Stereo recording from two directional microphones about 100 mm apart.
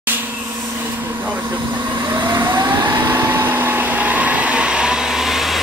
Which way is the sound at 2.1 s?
45° right (ahead or behind).